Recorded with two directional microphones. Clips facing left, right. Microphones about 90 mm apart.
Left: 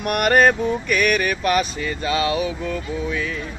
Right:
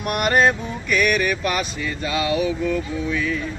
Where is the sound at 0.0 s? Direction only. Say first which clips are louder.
Left 2 dB; 45° left (ahead or behind).